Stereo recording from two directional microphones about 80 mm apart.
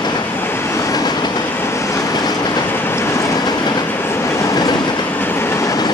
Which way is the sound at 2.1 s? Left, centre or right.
Left.